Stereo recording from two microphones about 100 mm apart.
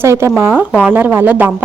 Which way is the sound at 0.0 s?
25° right (ahead or behind).